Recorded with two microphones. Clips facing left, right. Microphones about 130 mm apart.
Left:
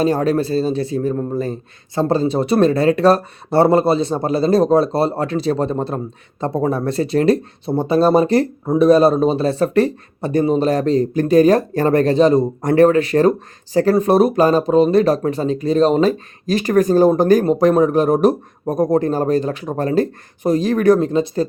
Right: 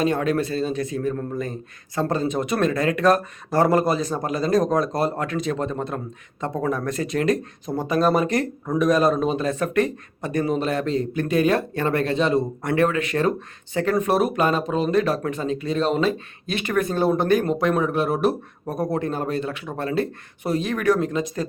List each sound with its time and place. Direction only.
0.0 s speech: 35° left (ahead or behind)